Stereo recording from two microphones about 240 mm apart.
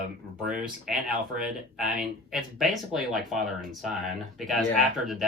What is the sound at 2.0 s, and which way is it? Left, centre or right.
Speech, centre.